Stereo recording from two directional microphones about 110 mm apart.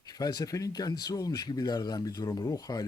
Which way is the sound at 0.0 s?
35° left (ahead or behind).